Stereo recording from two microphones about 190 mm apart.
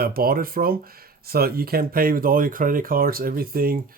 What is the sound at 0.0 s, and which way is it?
Speech, 50° right (ahead or behind).